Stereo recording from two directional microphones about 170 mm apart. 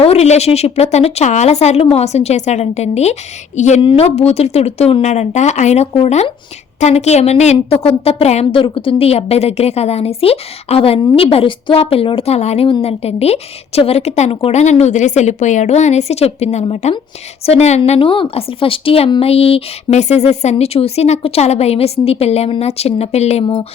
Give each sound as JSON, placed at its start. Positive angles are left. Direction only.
{"t": 0.0, "sound": "a woman's voice", "side_deg": 40}